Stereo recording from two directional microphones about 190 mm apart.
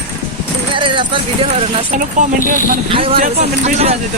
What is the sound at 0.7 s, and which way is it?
Speech, 25° right (ahead or behind).